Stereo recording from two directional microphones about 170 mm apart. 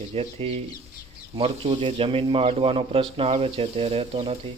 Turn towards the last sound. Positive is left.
turn(degrees=-35)  # may be behind; listen again after turning